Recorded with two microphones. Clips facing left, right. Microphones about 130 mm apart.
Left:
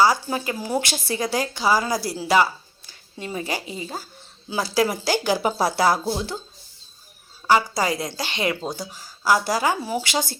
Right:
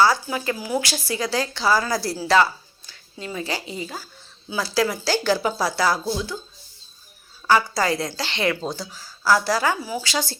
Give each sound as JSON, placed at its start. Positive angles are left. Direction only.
{"t": 0.6, "sound": "a woman's voice", "side_deg": 25}
{"t": 2.9, "sound": "speech", "side_deg": 30}
{"t": 7.5, "sound": "a woman's voice", "side_deg": 15}